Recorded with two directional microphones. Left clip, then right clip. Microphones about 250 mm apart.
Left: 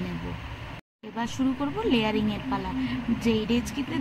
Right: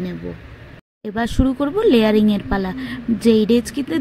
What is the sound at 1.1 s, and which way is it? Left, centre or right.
Speech, right.